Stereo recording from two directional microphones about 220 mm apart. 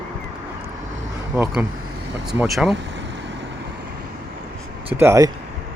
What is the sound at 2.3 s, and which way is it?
Speech, centre (ahead or behind).